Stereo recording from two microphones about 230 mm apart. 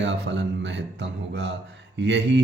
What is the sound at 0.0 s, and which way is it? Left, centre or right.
Speech, right.